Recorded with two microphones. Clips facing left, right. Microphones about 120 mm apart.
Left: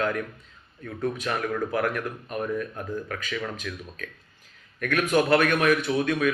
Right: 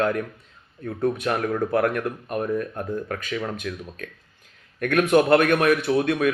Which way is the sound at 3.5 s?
55° right (ahead or behind).